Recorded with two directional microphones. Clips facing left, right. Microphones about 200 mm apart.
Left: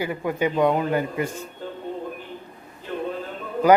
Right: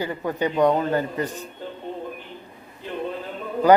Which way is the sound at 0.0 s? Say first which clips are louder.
Left 1 dB; 10° left (ahead or behind).